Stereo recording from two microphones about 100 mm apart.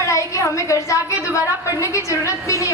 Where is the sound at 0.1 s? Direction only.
30° left (ahead or behind).